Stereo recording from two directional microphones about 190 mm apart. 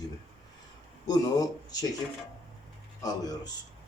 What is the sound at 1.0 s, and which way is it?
Speech, 20° left (ahead or behind).